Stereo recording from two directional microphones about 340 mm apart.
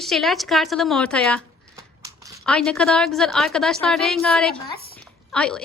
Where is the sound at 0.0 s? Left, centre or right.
Centre.